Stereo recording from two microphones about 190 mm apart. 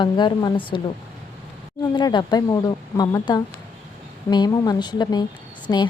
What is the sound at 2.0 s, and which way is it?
A woman's voice, 20° left (ahead or behind).